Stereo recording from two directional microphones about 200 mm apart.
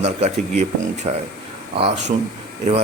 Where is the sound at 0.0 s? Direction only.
35° right (ahead or behind).